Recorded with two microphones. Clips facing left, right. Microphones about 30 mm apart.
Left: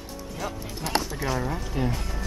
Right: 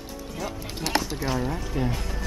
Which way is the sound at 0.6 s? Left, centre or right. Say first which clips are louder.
Right 2 dB; right.